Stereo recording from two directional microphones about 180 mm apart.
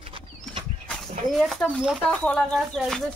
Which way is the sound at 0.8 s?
Centre (ahead or behind).